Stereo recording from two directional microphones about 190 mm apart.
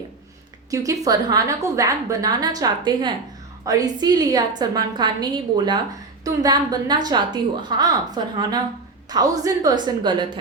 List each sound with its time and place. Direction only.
0.7 s a woman's voice: 20° right (ahead or behind)